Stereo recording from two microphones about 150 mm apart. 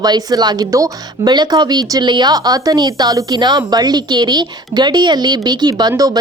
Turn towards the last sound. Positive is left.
turn(degrees=-20)  # may be behind; listen again after turning